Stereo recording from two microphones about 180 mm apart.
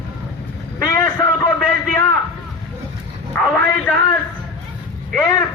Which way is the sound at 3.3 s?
10° left (ahead or behind).